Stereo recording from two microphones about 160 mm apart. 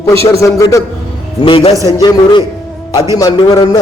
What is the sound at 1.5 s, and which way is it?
Speech, 35° left (ahead or behind).